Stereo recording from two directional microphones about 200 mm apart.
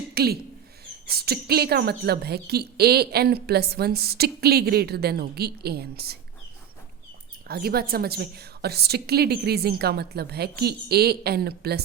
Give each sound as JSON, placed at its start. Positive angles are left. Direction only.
{"t": 0.1, "sound": "speech", "side_deg": -50}
{"t": 7.4, "sound": "speech", "side_deg": -50}